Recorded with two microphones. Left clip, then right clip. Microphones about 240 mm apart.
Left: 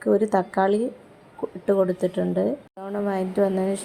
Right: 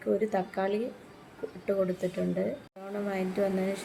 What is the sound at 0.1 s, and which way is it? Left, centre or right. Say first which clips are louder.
A woman's voice: left 8 dB; left.